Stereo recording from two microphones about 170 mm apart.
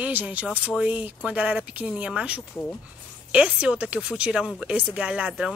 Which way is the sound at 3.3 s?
5° right (ahead or behind).